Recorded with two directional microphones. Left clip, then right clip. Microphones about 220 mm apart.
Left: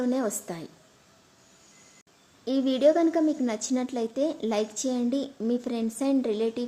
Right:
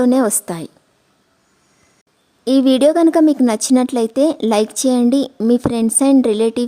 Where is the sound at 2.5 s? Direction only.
50° right (ahead or behind).